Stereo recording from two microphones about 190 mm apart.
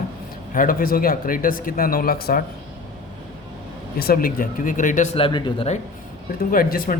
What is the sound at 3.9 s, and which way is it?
Speech, 50° left (ahead or behind).